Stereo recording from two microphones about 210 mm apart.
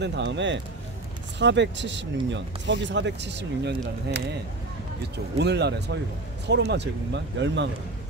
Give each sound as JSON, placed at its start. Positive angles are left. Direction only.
{"t": 0.0, "sound": "speech", "side_deg": -55}